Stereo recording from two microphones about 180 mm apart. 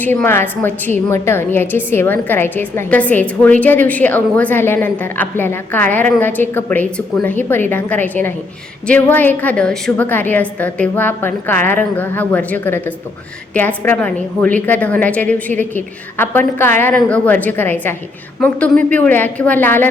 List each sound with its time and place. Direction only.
0.0 s a woman's voice: 10° left (ahead or behind)